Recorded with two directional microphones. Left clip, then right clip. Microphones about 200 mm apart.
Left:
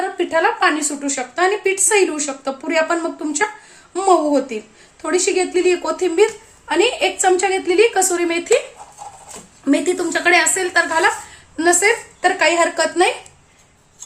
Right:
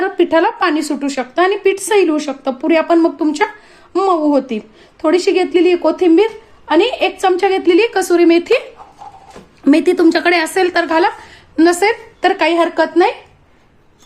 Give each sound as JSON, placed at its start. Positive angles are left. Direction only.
{"t": 0.2, "sound": "a woman's voice", "side_deg": -45}
{"t": 9.6, "sound": "a woman's voice", "side_deg": -45}
{"t": 12.7, "sound": "a woman's voice", "side_deg": -30}